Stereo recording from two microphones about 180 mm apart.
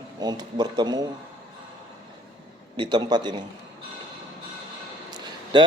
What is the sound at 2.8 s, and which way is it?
Speech, 25° right (ahead or behind).